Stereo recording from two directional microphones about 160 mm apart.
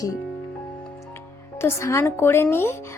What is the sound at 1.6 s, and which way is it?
A woman's voice, 15° left (ahead or behind).